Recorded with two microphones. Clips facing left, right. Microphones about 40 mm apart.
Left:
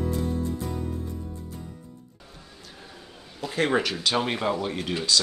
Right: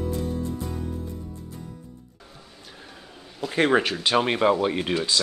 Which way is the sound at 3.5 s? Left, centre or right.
Centre.